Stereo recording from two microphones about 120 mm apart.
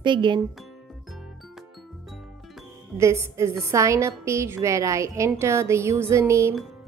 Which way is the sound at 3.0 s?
25° right (ahead or behind).